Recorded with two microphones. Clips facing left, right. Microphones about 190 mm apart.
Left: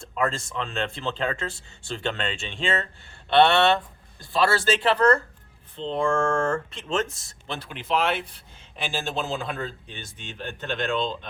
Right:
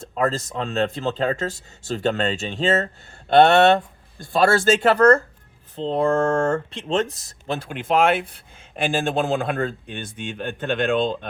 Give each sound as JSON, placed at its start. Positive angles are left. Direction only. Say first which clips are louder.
{"t": 0.0, "sound": "speech", "louder": "right 4 dB", "side_deg": -40}